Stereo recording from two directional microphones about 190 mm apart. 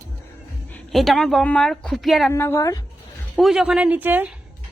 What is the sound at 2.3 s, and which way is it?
Speech, 15° left (ahead or behind).